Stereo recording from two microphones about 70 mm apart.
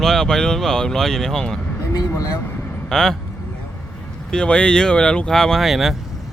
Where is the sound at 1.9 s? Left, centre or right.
Left.